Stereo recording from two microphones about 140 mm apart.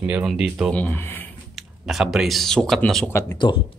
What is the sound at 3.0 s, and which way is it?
Speech, 20° left (ahead or behind).